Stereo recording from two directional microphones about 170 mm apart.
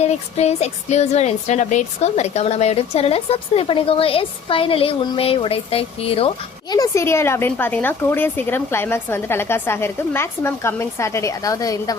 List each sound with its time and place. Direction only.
0.0 s speech: 40° left (ahead or behind)
6.7 s speech: 20° left (ahead or behind)